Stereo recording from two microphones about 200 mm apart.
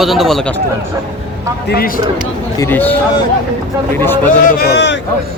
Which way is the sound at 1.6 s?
50° left (ahead or behind).